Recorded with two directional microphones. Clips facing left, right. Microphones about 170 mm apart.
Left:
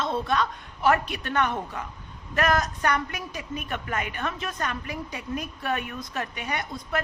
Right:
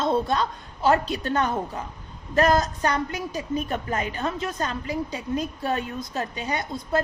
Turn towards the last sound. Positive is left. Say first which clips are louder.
# right 4 dB
turn(degrees=-25)  # may be behind; listen again after turning